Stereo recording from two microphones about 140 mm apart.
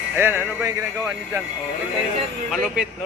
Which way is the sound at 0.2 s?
15° right (ahead or behind).